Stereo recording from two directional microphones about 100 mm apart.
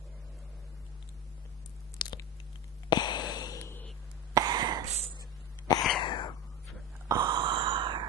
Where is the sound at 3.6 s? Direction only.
25° left (ahead or behind).